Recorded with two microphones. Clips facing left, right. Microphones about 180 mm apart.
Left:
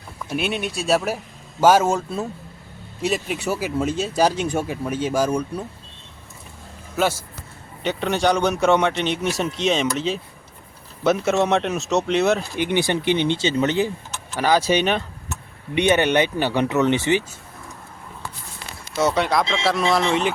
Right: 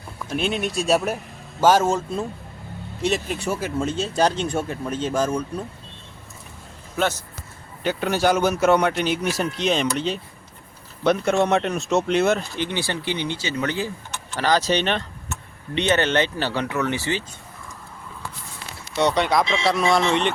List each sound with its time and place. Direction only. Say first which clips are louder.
0.3 s speech: even; 5° left (ahead or behind)
7.9 s speech: even; centre (ahead or behind)
12.4 s speech: left 5 dB; 15° left (ahead or behind)
14.3 s speech: left 2 dB; 10° left (ahead or behind)
18.9 s speech: even; 5° left (ahead or behind)